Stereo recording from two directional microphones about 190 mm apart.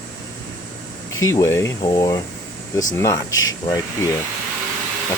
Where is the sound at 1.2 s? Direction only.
20° left (ahead or behind).